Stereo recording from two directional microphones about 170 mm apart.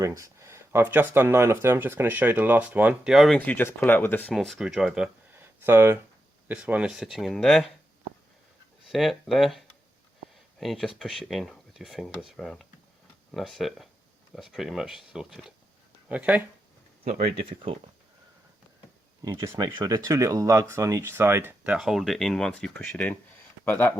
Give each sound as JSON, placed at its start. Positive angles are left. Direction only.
{"t": 0.0, "sound": "speech", "side_deg": -20}
{"t": 8.9, "sound": "speech", "side_deg": 0}
{"t": 17.0, "sound": "speech", "side_deg": -60}
{"t": 19.2, "sound": "speech", "side_deg": -20}